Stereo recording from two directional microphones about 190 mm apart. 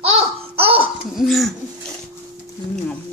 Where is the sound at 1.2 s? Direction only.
Centre (ahead or behind).